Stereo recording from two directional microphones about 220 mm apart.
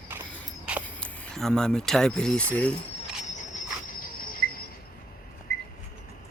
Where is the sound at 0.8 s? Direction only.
5° left (ahead or behind).